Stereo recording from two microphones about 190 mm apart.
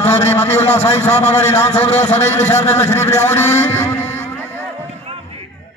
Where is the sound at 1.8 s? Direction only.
35° left (ahead or behind).